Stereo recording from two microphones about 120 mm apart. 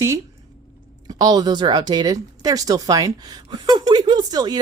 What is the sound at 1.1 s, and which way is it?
Speech, 35° right (ahead or behind).